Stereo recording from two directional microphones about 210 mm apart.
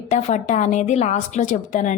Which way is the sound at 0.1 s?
35° left (ahead or behind).